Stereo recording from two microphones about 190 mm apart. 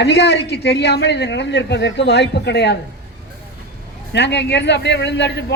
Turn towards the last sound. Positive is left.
turn(degrees=60)  # may be behind; listen again after turning